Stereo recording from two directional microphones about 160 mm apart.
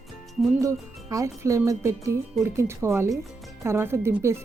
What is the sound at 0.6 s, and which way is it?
Speech, 20° right (ahead or behind).